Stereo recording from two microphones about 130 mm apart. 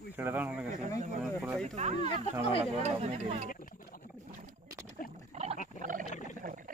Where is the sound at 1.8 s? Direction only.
60° right (ahead or behind).